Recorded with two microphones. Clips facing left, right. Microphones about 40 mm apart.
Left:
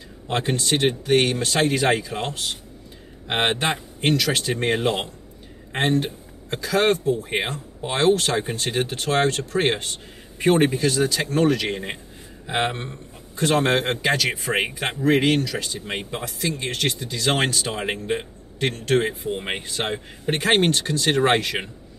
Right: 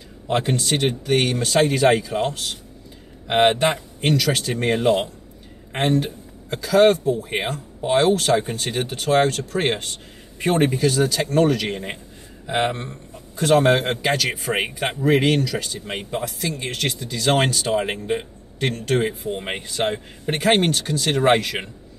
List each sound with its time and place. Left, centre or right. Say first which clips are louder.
0.4 s speech: left 1 dB; centre
5.7 s a sound: right 1 dB; centre
6.6 s speech: right 5 dB; centre
7.3 s speech: even; centre
7.8 s speech: right 2 dB; centre
10.8 s speech: right 2 dB; centre